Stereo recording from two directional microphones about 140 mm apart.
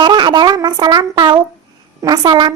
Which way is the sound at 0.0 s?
35° right (ahead or behind).